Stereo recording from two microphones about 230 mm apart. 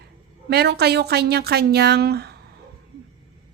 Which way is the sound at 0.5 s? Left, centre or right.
Right.